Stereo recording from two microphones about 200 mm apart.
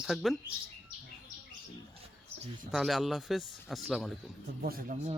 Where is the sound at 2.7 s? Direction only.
Centre (ahead or behind).